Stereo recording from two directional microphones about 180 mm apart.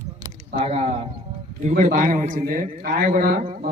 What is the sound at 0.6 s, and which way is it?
A man's voice, 35° right (ahead or behind).